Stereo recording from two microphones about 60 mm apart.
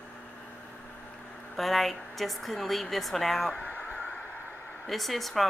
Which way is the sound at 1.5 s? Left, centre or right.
Centre.